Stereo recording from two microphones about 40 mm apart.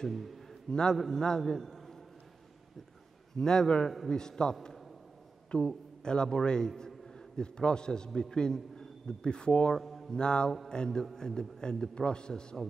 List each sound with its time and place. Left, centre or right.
0.1 s a sound: centre
0.7 s a man's voice: centre
3.3 s a man's voice: centre
9.8 s speech: centre
10.1 s a man's voice: left